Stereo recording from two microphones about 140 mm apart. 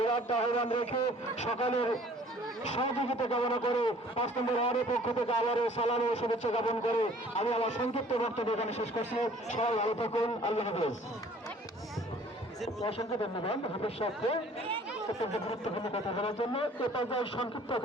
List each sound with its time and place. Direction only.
0.0 s a man's voice: 40° left (ahead or behind)
13.4 s speech: 40° left (ahead or behind)
15.8 s a man's voice: 40° left (ahead or behind)